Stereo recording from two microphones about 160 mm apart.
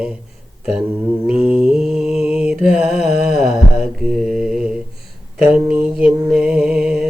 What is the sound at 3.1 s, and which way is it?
Music, 80° right.